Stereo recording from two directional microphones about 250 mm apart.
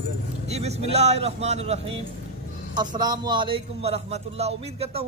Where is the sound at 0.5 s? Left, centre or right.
Right.